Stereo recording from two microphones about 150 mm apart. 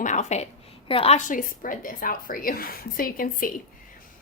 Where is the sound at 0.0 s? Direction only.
50° left (ahead or behind).